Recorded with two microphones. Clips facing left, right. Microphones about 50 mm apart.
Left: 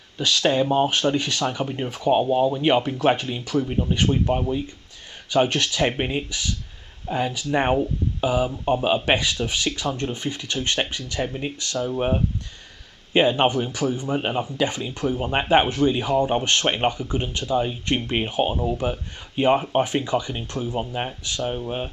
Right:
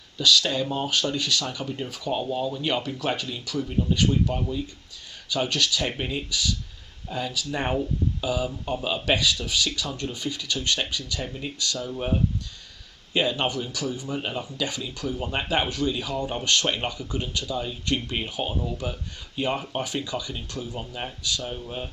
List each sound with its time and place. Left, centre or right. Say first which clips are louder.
0.2 s speech: left 3 dB; left